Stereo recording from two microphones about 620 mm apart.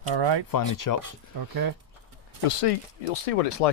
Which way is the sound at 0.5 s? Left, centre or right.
Left.